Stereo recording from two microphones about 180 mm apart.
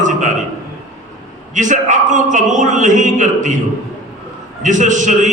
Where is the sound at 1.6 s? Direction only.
45° right (ahead or behind).